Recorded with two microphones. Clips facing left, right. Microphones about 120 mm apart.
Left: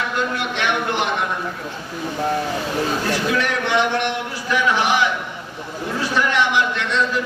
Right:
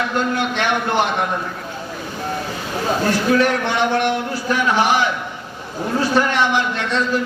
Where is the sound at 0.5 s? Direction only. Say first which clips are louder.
Right 1 dB; 40° right (ahead or behind).